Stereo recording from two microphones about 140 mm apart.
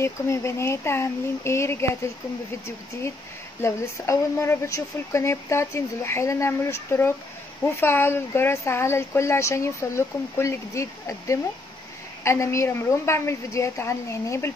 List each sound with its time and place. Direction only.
0.0 s speech: 20° left (ahead or behind)
3.6 s speech: 20° left (ahead or behind)